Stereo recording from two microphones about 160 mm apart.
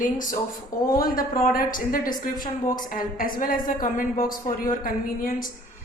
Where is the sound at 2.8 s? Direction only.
60° left (ahead or behind).